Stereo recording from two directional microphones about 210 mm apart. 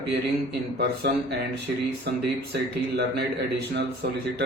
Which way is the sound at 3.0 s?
50° right (ahead or behind).